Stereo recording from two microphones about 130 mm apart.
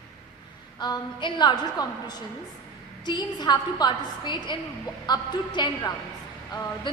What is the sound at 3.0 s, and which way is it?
A woman's voice, 35° left (ahead or behind).